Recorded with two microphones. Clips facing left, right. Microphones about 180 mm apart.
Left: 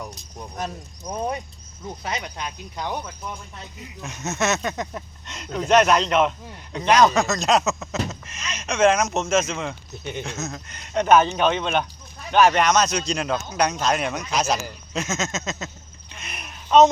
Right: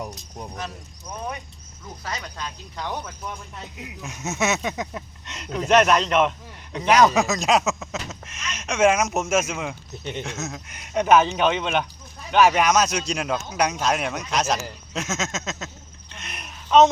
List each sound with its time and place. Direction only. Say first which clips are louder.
0.5 s speech: left 3 dB; 35° left (ahead or behind)
2.0 s speech: left 2 dB; 20° left (ahead or behind)
4.0 s speech: left 1 dB; centre (ahead or behind)
10.7 s speech: left 1 dB; 10° right (ahead or behind)
16.1 s a sound: left 1 dB; 5° left (ahead or behind)